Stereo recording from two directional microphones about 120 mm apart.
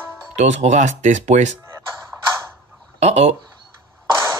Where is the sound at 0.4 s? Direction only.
70° right (ahead or behind).